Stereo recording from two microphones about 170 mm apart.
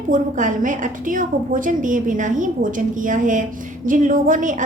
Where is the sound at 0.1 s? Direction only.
50° right (ahead or behind).